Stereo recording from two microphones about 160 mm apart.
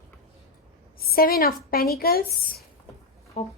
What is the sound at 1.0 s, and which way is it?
A woman's voice, 70° left (ahead or behind).